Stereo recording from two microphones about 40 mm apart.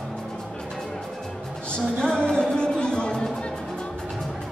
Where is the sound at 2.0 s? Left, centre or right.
Left.